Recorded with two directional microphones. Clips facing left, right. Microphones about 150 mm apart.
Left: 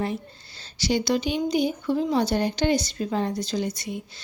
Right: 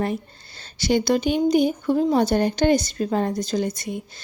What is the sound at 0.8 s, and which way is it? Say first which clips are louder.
Speech: right 4 dB; 55° right (ahead or behind).